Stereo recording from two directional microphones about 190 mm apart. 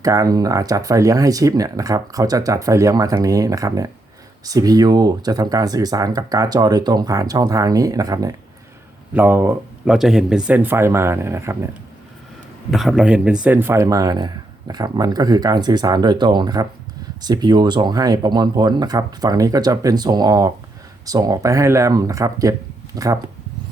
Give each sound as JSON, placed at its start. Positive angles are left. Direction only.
{"t": 0.0, "sound": "speech", "side_deg": -20}
{"t": 12.7, "sound": "speech", "side_deg": 0}